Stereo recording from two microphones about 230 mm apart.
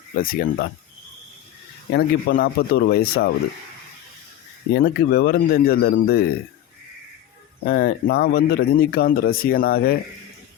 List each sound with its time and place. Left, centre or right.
0.2 s speech: left
1.9 s speech: left
4.7 s speech: left
7.6 s speech: left